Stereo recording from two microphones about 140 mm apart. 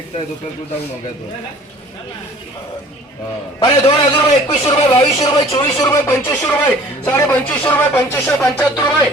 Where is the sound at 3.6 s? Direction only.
35° left (ahead or behind).